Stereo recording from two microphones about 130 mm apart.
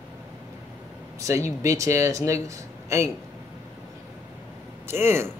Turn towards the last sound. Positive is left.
turn(degrees=-20)  # may be behind; listen again after turning